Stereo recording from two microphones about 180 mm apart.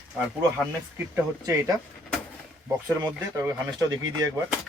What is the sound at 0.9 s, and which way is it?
Speech, 15° right (ahead or behind).